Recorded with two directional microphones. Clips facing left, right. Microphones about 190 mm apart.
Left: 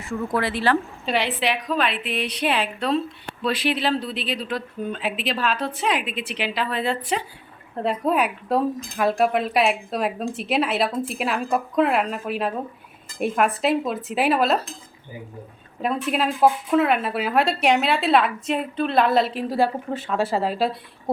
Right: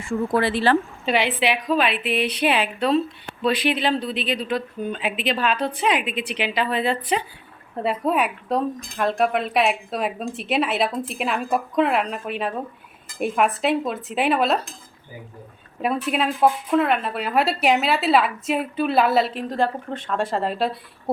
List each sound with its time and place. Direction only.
0.0 s speech: 30° right (ahead or behind)
1.0 s speech: centre (ahead or behind)
15.8 s speech: 5° right (ahead or behind)